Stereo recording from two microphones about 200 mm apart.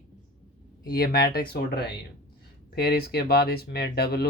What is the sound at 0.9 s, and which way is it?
Speech, 50° left (ahead or behind).